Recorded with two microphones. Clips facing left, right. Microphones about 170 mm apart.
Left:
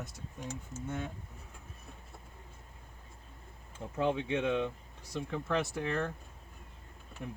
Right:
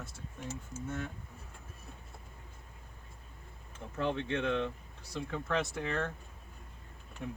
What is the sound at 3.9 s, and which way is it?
Speech, 10° left (ahead or behind).